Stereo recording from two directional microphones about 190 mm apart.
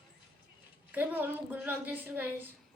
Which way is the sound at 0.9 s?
10° right (ahead or behind).